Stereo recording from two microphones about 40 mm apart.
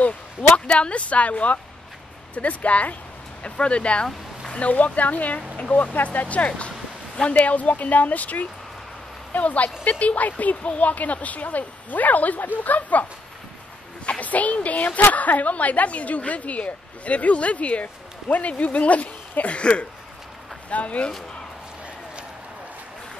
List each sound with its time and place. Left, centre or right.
0.0 s a woman's voice: left
14.2 s a woman's voice: left